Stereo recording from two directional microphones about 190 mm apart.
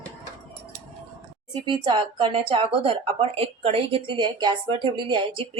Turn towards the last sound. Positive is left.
turn(degrees=-25)  # may be behind; listen again after turning